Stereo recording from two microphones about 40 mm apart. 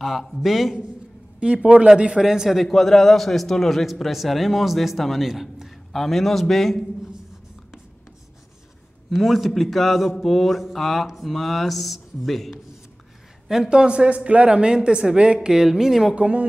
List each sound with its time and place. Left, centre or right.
0.0 s a man's voice: centre
1.4 s speech: right
2.2 s speech: centre
2.6 s a man's voice: centre
5.3 s a man's voice: centre
5.9 s a man's voice: centre
9.1 s a man's voice: centre
13.5 s speech: centre
16.2 s a woman's voice: right